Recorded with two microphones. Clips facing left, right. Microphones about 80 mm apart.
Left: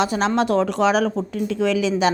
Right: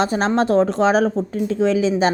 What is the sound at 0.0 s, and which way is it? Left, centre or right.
A woman's voice, right.